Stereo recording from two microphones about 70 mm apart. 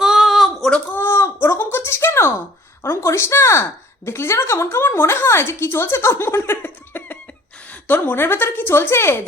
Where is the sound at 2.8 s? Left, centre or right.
Left.